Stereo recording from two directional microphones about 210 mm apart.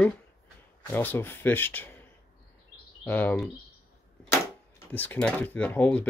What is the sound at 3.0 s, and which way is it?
Speech, 10° left (ahead or behind).